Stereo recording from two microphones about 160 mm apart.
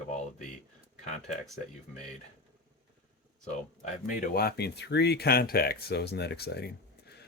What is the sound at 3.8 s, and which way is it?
Speech, 55° left (ahead or behind).